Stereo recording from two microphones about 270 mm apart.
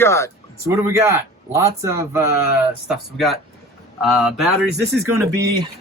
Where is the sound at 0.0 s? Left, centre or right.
Centre.